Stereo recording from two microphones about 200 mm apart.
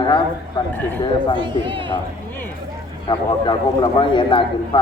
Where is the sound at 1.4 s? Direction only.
25° right (ahead or behind).